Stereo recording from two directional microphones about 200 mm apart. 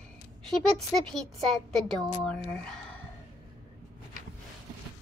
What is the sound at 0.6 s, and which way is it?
Speech, centre (ahead or behind).